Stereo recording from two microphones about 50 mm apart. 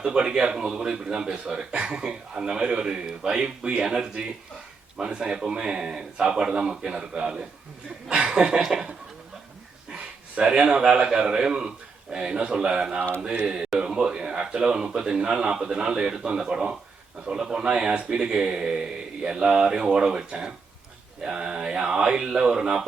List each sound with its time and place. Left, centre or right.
0.0 s a man's voice: centre